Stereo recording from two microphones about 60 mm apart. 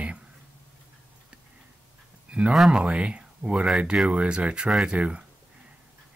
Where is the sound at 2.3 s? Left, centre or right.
Centre.